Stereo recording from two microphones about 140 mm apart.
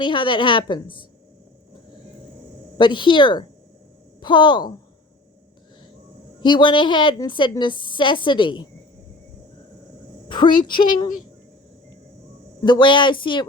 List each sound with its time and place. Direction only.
0.0 s a woman's voice: 35° left (ahead or behind)
2.7 s a woman's voice: 35° left (ahead or behind)
6.4 s a woman's voice: 35° left (ahead or behind)
10.2 s a woman's voice: 35° left (ahead or behind)
12.6 s a woman's voice: 35° left (ahead or behind)